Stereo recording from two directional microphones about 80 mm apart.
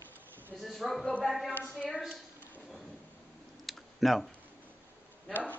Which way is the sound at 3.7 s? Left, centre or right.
Centre.